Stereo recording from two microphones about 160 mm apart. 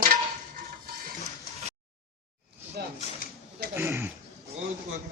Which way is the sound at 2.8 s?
80° right.